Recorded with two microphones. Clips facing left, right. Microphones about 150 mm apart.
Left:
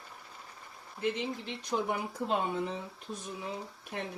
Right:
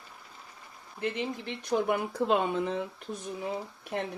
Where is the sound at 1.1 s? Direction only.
60° right (ahead or behind).